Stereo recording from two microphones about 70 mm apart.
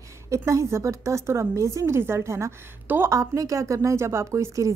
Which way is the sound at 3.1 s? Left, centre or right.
Right.